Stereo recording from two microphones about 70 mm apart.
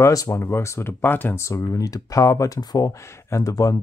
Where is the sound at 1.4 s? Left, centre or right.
Left.